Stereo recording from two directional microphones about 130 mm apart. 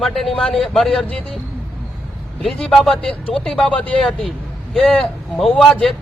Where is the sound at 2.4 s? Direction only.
5° left (ahead or behind).